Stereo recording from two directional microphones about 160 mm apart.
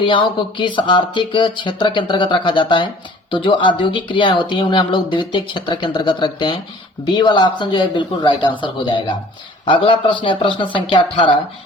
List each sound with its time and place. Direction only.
0.0 s speech: 30° left (ahead or behind)